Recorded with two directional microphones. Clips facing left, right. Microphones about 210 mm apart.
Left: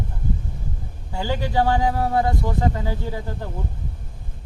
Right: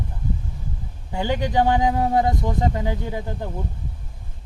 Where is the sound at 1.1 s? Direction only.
20° right (ahead or behind).